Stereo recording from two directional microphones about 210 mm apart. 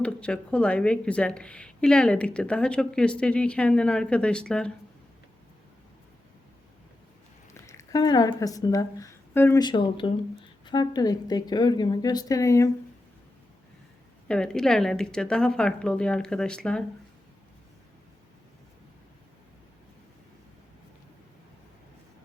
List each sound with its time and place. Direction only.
0.0 s a woman's voice: 5° left (ahead or behind)
7.5 s a woman's voice: 15° left (ahead or behind)
14.3 s a woman's voice: 5° left (ahead or behind)